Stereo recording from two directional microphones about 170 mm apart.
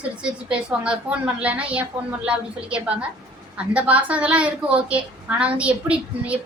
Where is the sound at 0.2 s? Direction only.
5° right (ahead or behind).